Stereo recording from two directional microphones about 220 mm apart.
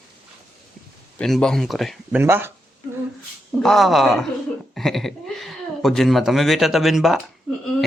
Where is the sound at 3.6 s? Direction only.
Centre (ahead or behind).